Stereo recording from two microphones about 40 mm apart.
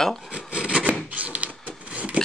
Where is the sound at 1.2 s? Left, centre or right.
Right.